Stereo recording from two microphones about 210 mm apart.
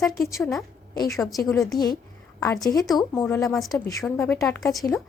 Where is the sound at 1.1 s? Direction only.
Centre (ahead or behind).